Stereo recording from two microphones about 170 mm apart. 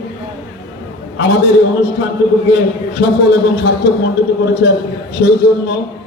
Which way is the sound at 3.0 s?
65° left (ahead or behind).